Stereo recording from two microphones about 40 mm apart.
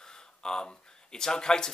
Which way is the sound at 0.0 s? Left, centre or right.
Centre.